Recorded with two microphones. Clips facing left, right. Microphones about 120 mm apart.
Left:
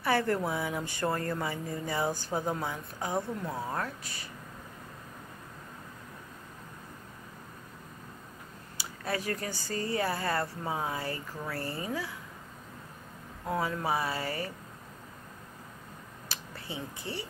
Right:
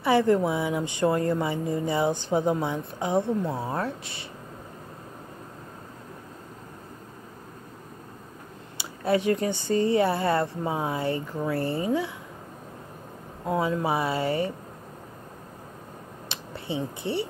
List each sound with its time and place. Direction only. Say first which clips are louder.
0.0 s speech: right 7 dB; 20° right (ahead or behind)
8.7 s speech: right 10 dB; 25° right (ahead or behind)
13.5 s speech: right 5 dB; 25° right (ahead or behind)
16.3 s a sound: right 8 dB; 25° right (ahead or behind)